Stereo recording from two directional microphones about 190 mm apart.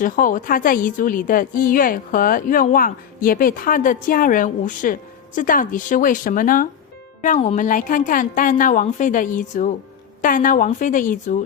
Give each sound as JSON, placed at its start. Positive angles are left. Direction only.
{"t": 0.0, "sound": "a woman's voice", "side_deg": 45}